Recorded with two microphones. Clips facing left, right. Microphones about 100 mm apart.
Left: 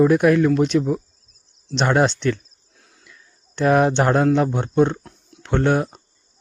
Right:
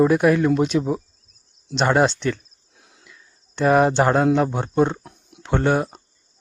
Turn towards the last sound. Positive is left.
turn(degrees=0)  # may be behind; listen again after turning